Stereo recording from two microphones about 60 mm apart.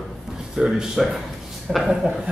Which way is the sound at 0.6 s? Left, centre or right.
Centre.